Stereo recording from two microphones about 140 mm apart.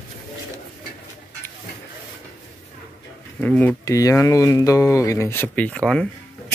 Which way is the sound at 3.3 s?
10° left (ahead or behind).